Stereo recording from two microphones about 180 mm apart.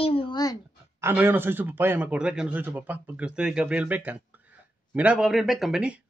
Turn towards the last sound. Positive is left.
turn(degrees=-5)  # may be behind; listen again after turning